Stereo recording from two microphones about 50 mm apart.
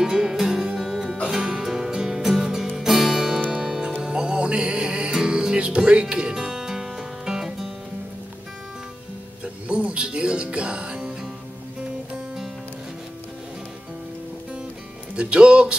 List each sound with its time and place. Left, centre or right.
0.0 s music: centre
9.4 s music: right
15.1 s speech: right